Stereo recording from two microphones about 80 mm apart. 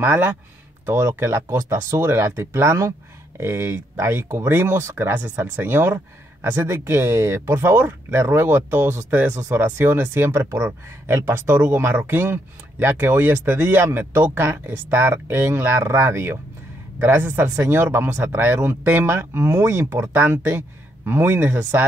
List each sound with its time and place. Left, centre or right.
0.0 s speech: right